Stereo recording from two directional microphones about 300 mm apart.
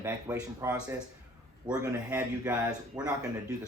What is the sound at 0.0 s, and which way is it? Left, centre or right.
Speech, centre.